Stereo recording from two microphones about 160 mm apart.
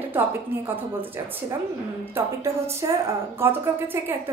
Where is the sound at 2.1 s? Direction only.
15° right (ahead or behind).